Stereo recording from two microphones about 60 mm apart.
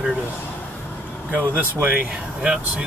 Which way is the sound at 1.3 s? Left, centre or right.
Right.